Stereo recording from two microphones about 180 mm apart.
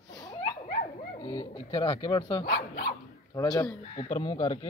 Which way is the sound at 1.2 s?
25° left (ahead or behind).